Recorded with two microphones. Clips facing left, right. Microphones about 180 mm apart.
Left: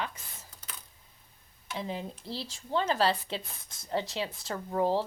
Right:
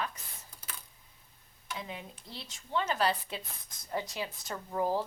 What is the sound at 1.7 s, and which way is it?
A woman's voice, 30° left (ahead or behind).